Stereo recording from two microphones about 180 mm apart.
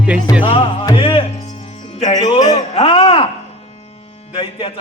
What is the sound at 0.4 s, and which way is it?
Speech, 30° left (ahead or behind).